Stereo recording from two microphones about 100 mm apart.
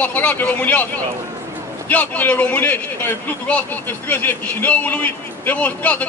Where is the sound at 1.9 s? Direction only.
15° left (ahead or behind).